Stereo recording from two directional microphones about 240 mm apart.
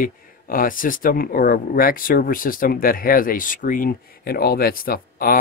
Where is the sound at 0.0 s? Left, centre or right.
Left.